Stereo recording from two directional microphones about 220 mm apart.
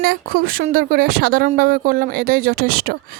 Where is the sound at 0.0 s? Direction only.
40° right (ahead or behind).